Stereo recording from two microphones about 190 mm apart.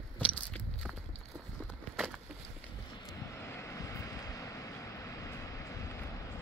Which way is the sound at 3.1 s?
15° left (ahead or behind).